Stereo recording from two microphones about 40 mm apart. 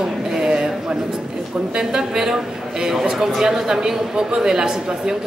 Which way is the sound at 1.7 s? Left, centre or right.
Centre.